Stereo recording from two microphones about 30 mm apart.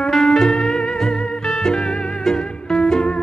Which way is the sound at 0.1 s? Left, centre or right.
Centre.